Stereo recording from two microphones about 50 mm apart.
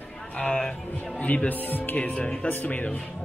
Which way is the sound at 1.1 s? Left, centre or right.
Left.